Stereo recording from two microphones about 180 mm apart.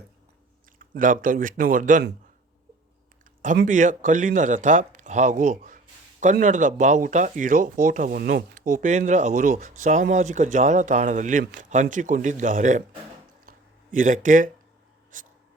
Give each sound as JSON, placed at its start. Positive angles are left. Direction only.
{"t": 0.8, "sound": "speech", "side_deg": -50}
{"t": 3.7, "sound": "speech", "side_deg": -45}
{"t": 13.4, "sound": "a sound", "side_deg": -50}